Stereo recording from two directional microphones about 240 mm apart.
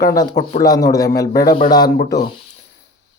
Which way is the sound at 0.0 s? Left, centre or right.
Centre.